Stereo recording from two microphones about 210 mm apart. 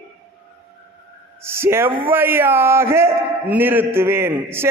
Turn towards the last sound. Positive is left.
turn(degrees=-10)  # may be behind; listen again after turning